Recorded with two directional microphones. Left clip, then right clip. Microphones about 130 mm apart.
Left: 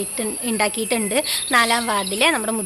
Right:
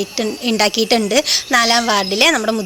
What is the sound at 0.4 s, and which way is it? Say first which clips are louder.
Speech: right 6 dB; 35° right (ahead or behind).